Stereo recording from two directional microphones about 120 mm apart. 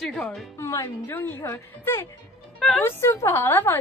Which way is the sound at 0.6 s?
25° left (ahead or behind).